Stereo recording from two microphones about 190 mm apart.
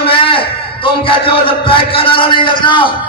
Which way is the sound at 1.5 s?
25° left (ahead or behind).